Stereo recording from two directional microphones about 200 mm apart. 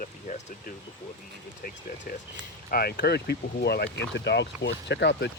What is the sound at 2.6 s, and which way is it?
Speech, 50° left (ahead or behind).